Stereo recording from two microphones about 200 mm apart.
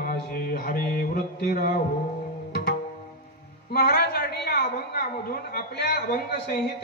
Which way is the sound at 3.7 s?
50° left (ahead or behind).